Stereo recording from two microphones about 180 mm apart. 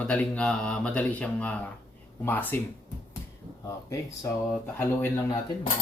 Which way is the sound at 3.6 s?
20° left (ahead or behind).